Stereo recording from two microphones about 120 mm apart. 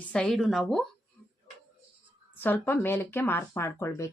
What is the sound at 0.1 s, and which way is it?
Speech, 5° left (ahead or behind).